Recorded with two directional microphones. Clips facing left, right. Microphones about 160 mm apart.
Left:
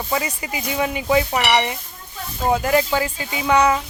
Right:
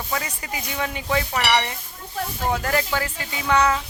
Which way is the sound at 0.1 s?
15° left (ahead or behind).